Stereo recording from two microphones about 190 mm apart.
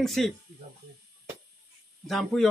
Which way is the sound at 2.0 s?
Centre (ahead or behind).